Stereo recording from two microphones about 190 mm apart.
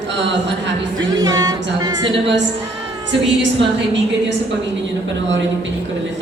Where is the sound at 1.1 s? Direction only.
20° right (ahead or behind).